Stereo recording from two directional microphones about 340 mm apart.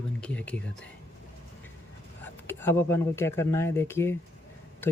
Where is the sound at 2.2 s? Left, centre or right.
Centre.